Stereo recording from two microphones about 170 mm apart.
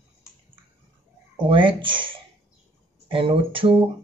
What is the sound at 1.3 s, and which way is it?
Speech, 30° right (ahead or behind).